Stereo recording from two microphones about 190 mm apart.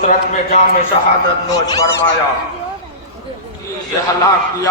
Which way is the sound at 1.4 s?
20° left (ahead or behind).